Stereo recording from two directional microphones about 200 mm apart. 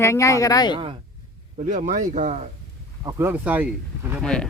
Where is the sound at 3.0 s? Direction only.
15° right (ahead or behind).